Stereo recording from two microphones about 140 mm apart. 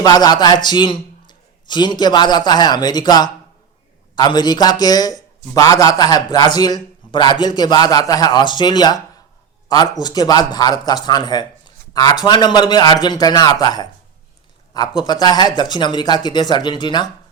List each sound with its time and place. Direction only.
0.0 s a man's voice: 30° left (ahead or behind)
10.0 s speech: 30° left (ahead or behind)